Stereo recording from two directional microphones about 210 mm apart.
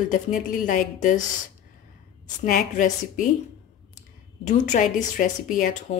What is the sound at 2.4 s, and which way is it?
Speech, 40° left (ahead or behind).